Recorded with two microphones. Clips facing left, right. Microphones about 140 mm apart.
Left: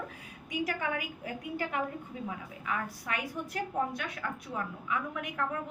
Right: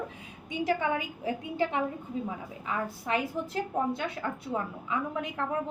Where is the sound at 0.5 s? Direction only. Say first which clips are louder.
Right 5 dB; 25° right (ahead or behind).